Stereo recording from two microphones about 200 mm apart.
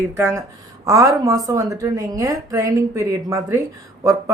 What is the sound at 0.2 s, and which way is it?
A woman's voice, 10° right (ahead or behind).